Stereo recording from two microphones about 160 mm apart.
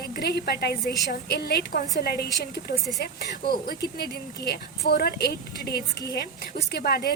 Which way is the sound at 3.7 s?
80° left.